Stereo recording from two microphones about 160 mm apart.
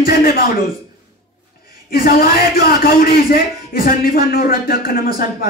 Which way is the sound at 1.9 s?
70° left (ahead or behind).